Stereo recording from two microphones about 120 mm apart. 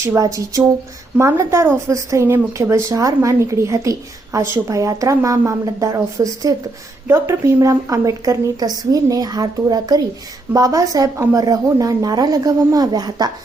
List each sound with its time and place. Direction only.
0.0 s a woman's voice: 25° right (ahead or behind)